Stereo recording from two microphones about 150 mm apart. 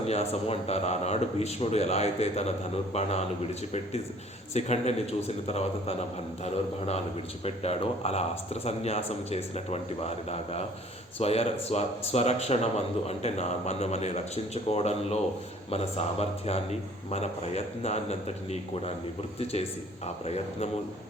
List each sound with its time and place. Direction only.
0.0 s speech: 45° left (ahead or behind)
4.5 s speech: 50° left (ahead or behind)
6.4 s speech: 45° left (ahead or behind)